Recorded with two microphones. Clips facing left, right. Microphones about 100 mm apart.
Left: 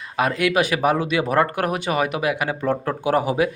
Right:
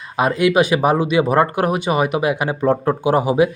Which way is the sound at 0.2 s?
20° right (ahead or behind).